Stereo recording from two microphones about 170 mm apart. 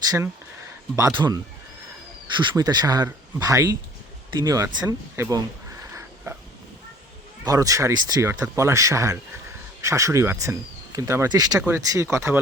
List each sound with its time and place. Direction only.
0.9 s speech: 20° right (ahead or behind)
5.9 s a sound: 15° right (ahead or behind)
7.4 s speech: 20° right (ahead or behind)